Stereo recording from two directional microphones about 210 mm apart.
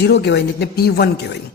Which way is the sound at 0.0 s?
55° left (ahead or behind).